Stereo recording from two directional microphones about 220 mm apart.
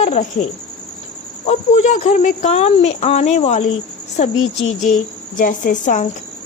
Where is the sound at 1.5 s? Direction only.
30° left (ahead or behind).